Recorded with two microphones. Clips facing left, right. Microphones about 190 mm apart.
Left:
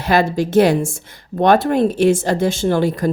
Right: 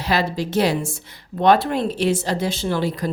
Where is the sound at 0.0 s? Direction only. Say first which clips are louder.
Left 6 dB; 50° left (ahead or behind).